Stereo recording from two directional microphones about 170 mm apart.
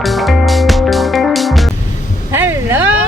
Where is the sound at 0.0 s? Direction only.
Centre (ahead or behind).